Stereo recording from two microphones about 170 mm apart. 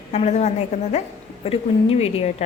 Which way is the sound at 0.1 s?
40° left (ahead or behind).